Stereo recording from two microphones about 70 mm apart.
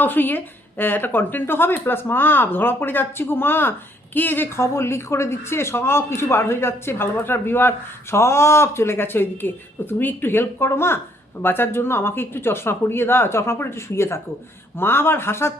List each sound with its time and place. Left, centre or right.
0.0 s a woman's voice: left
4.5 s speech: left